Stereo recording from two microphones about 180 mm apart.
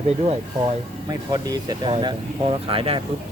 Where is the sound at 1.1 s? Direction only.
20° right (ahead or behind).